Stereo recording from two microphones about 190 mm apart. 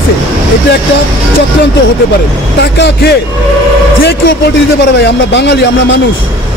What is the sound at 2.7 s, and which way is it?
Speech, 65° left (ahead or behind).